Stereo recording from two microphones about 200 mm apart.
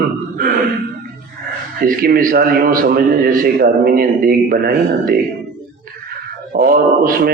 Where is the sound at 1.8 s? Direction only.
45° right (ahead or behind).